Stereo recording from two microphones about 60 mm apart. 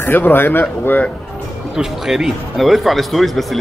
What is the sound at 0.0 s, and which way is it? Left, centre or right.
Speech, left.